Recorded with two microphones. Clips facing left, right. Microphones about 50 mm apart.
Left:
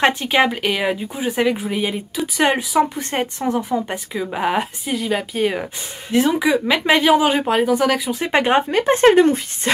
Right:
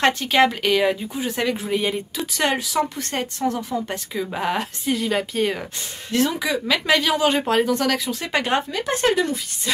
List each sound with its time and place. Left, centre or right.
0.0 s speech: centre
2.4 s speech: centre
8.6 s speech: left